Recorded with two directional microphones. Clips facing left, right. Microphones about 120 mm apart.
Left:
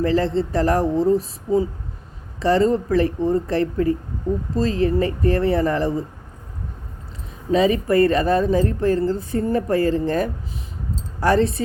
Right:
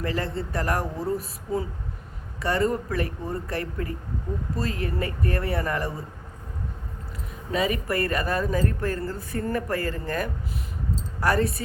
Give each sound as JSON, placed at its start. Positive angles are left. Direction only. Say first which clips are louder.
{"t": 0.0, "sound": "a woman's voice", "louder": "left 9 dB", "side_deg": 30}
{"t": 7.5, "sound": "a woman's voice", "louder": "left 9 dB", "side_deg": 25}